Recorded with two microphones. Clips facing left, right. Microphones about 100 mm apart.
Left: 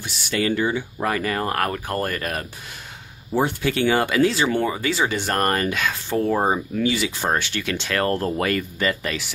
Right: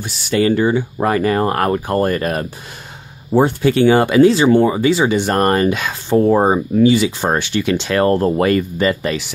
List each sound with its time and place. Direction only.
0.0 s speech: 30° right (ahead or behind)